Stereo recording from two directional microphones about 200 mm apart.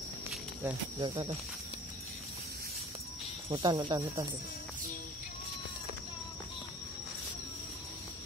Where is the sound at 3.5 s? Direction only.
20° right (ahead or behind).